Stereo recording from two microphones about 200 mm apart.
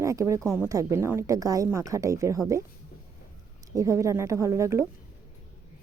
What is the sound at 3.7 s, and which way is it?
Speech, 15° right (ahead or behind).